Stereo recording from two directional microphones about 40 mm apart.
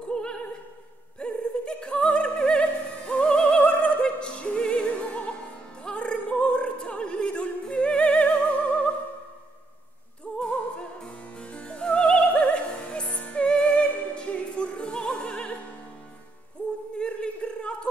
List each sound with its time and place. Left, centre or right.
0.1 s opera: left
10.4 s opera: left
11.1 s music: left
13.1 s music: left
13.5 s music: left
14.1 s opera: left
17.0 s a sound: left